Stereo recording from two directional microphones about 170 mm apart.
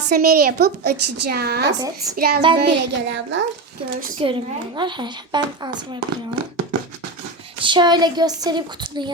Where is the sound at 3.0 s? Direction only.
90° right.